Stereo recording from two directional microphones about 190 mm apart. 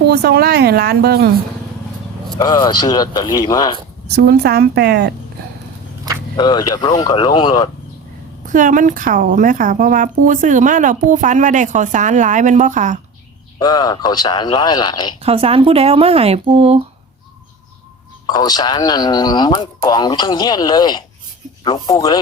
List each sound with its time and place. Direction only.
0.1 s speech: 60° right (ahead or behind)
2.4 s speech: 20° left (ahead or behind)
4.1 s speech: 60° right (ahead or behind)
6.3 s speech: 20° left (ahead or behind)
8.4 s speech: 45° right (ahead or behind)
13.6 s speech: 20° left (ahead or behind)
15.2 s speech: 30° right (ahead or behind)
18.3 s speech: 20° left (ahead or behind)